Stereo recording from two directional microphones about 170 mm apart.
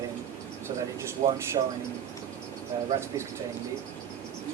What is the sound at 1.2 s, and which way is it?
Speech, 40° right (ahead or behind).